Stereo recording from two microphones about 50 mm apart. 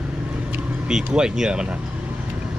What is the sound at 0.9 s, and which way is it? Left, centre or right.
Speech, centre.